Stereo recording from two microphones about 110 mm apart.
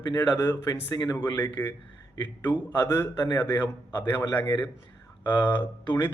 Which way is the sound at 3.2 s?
40° left (ahead or behind).